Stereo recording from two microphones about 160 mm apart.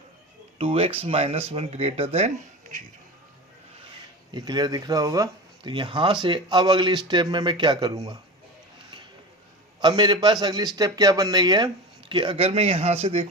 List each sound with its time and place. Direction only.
0.6 s speech: 35° right (ahead or behind)
4.3 s speech: 25° right (ahead or behind)
9.8 s speech: 25° right (ahead or behind)